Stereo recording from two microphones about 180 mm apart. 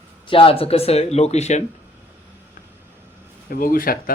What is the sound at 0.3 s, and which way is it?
Speech, 30° left (ahead or behind).